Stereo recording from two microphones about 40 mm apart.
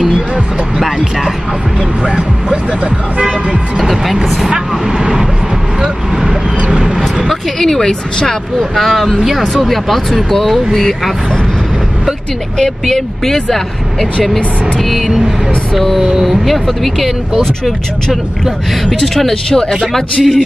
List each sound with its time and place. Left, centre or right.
0.7 s vehicle: centre
2.0 s a sound: right
3.7 s music: centre
4.9 s vehicle: centre
7.2 s a sound: centre
8.5 s vehicle: centre
9.1 s speech: centre
9.4 s speech: centre
12.5 s speech: centre
14.8 s vehicle: centre
16.0 s speech: centre
16.4 s vehicle: centre
18.9 s speech: centre
19.9 s vehicle: centre